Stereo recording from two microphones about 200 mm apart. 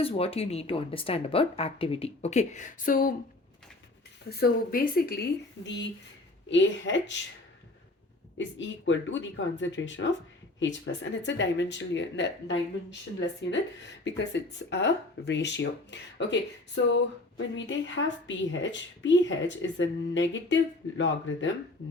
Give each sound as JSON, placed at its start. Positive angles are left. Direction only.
{"t": 0.0, "sound": "a woman's voice", "side_deg": 30}
{"t": 4.3, "sound": "speech", "side_deg": 50}
{"t": 8.4, "sound": "speech", "side_deg": 65}